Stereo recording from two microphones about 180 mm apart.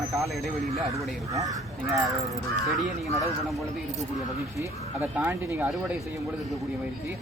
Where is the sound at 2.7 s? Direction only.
Centre (ahead or behind).